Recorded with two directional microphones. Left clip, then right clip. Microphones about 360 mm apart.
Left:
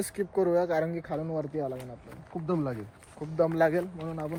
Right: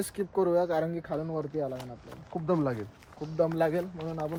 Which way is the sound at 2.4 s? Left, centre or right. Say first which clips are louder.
Right 3 dB; right.